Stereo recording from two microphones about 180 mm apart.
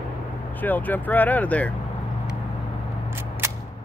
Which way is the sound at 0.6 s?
10° left (ahead or behind).